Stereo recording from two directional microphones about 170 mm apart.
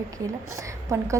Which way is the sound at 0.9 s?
15° right (ahead or behind).